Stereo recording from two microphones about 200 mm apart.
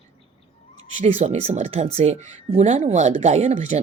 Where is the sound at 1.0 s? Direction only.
35° right (ahead or behind).